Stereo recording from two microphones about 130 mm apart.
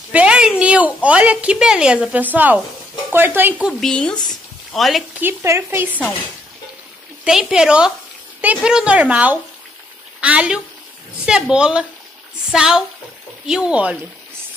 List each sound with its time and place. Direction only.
0.1 s a woman's voice: 10° right (ahead or behind)
3.6 s a woman's voice: 5° left (ahead or behind)
4.3 s a sound: centre (ahead or behind)
5.2 s a woman's voice: 20° right (ahead or behind)
7.2 s a woman's voice: 5° right (ahead or behind)